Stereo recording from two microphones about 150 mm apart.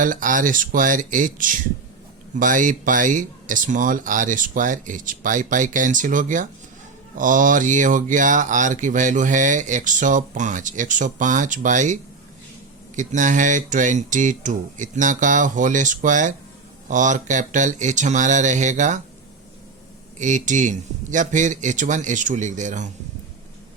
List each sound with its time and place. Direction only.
0.0 s speech: 60° right (ahead or behind)
13.0 s speech: 55° right (ahead or behind)
20.1 s speech: 55° right (ahead or behind)